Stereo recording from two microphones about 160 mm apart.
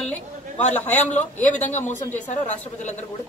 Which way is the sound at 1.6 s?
45° left (ahead or behind).